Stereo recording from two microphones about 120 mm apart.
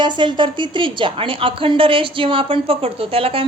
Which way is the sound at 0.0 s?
40° right (ahead or behind).